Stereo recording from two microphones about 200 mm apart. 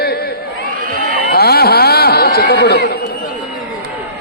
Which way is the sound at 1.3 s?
50° left (ahead or behind).